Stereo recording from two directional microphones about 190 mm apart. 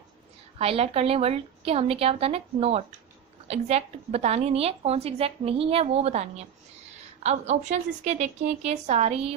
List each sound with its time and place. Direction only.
0.6 s a woman's voice: 30° right (ahead or behind)